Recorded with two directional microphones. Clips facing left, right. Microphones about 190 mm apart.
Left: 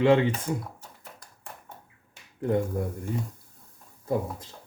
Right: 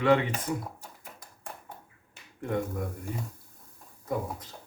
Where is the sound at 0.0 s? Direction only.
25° left (ahead or behind).